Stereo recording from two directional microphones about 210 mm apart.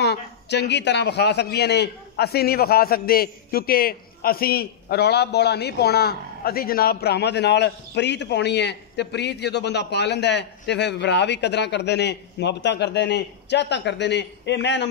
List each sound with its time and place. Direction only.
0.0 s a man's voice: 55° left (ahead or behind)